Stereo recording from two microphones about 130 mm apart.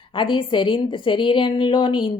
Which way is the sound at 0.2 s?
40° left (ahead or behind).